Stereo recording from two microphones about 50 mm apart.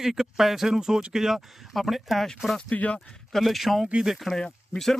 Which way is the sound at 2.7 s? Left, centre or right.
Left.